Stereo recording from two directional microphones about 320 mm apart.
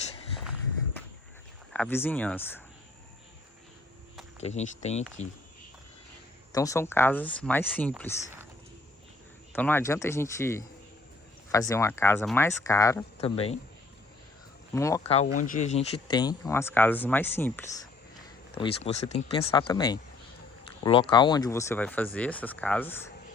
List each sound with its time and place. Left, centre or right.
1.7 s speech: centre
4.4 s speech: left
6.5 s speech: centre
9.5 s speech: centre
11.7 s speech: centre
14.7 s speech: centre
18.5 s speech: centre